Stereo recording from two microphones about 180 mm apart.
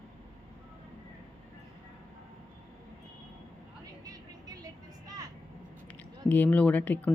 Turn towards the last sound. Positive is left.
turn(degrees=10)  # may be behind; listen again after turning